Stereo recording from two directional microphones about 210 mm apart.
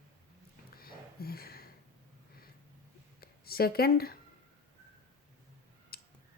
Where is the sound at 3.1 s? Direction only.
45° left (ahead or behind).